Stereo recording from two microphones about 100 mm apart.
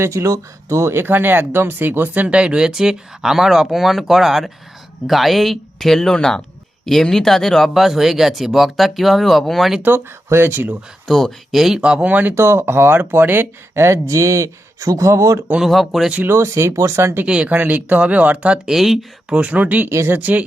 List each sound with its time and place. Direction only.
0.0 s speech: 30° right (ahead or behind); by 9.8 s centre (ahead or behind)
9.8 s speech: 20° right (ahead or behind)
11.1 s speech: 5° left (ahead or behind); by 15.4 s 30° right (ahead or behind)
15.6 s speech: centre (ahead or behind)
16.1 s speech: 25° right (ahead or behind)
17.2 s speech: 10° right (ahead or behind)
19.4 s speech: 15° right (ahead or behind)